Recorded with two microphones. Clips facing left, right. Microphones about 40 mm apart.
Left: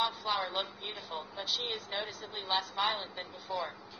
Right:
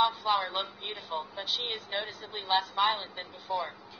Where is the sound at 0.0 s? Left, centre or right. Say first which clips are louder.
Right 6 dB; centre.